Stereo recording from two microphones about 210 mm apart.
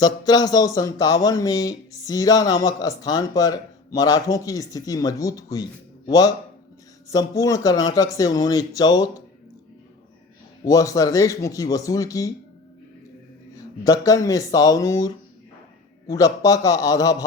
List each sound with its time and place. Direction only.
0.0 s speech: 20° left (ahead or behind)
10.6 s speech: 15° left (ahead or behind)
13.5 s speech: 15° left (ahead or behind)